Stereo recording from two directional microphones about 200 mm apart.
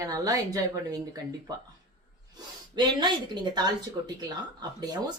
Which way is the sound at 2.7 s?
20° right (ahead or behind).